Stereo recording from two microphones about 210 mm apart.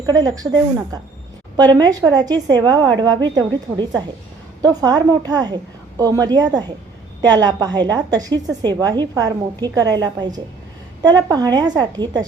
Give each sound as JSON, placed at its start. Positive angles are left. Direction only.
{"t": 0.0, "sound": "a woman's voice", "side_deg": -20}